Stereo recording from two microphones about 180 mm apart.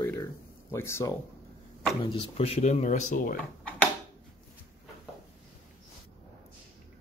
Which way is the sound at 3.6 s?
10° left (ahead or behind).